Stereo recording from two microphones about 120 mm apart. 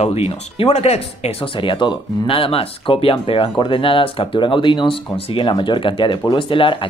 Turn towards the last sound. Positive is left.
turn(degrees=45)  # may be behind; listen again after turning